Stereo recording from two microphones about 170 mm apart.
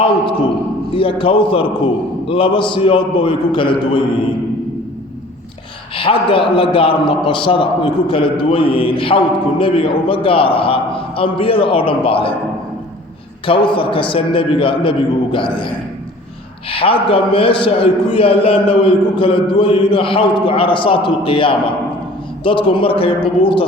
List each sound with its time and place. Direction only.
0.9 s a man's voice: 30° left (ahead or behind)
6.0 s a man's voice: 30° left (ahead or behind)
13.4 s a man's voice: 30° left (ahead or behind)